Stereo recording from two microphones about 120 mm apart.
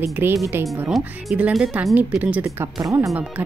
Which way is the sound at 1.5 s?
5° right (ahead or behind).